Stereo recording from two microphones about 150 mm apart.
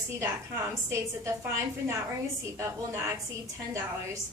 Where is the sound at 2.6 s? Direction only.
20° right (ahead or behind).